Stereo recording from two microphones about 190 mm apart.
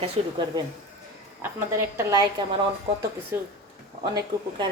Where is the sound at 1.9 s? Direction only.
20° right (ahead or behind).